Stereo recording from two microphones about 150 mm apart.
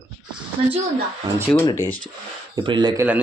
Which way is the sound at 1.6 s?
20° left (ahead or behind).